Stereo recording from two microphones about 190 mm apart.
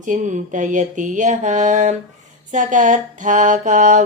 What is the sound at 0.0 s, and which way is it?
Mantra, 40° right (ahead or behind).